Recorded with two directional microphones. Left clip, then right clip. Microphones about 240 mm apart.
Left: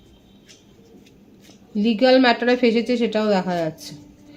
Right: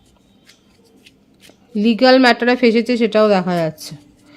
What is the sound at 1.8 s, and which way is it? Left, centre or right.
Speech, right.